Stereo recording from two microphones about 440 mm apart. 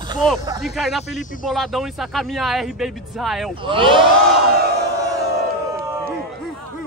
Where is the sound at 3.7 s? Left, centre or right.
Centre.